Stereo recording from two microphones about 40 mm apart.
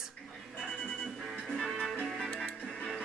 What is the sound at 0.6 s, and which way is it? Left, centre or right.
Music, left.